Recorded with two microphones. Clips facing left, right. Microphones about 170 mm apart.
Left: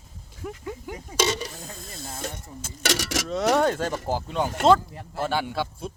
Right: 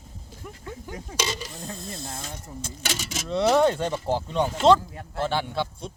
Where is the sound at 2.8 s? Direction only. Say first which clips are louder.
Left 7 dB; 85° left.